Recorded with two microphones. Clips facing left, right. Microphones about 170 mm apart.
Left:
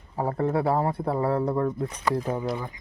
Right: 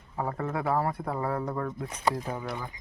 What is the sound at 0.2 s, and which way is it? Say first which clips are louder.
Speech: left 6 dB; 35° left (ahead or behind).